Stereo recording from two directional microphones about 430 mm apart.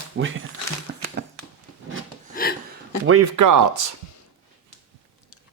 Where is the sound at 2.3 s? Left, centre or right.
Left.